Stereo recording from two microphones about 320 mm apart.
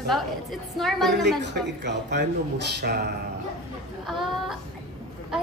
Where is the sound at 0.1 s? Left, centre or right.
Centre.